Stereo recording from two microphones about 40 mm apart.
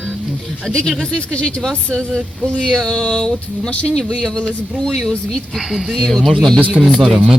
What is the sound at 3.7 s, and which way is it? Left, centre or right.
Speech, left.